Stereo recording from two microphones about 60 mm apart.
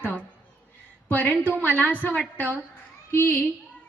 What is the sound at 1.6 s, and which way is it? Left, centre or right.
Speech, left.